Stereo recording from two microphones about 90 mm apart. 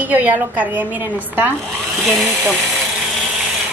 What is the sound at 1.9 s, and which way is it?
Speech, centre (ahead or behind).